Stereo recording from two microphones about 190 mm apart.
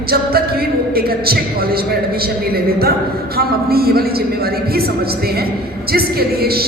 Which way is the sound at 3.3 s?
55° right (ahead or behind).